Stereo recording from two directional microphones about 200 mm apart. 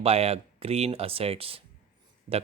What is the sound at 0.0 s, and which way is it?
Speech, 30° right (ahead or behind).